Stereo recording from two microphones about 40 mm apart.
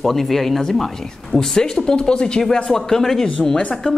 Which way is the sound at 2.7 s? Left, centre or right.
Centre.